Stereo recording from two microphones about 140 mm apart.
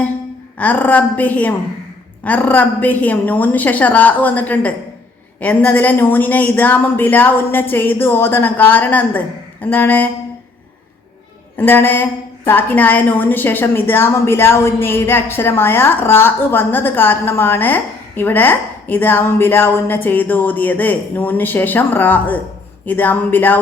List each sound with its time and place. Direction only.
0.6 s a woman's voice: 10° left (ahead or behind)
11.5 s a woman's voice: 15° left (ahead or behind)